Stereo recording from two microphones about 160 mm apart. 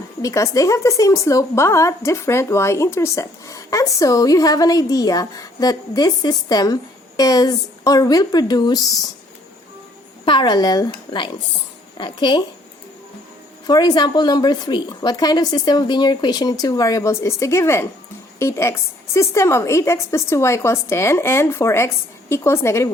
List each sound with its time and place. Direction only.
0.2 s a woman's voice: 20° left (ahead or behind)
10.2 s a woman's voice: 30° left (ahead or behind)
13.7 s a woman's voice: 25° left (ahead or behind)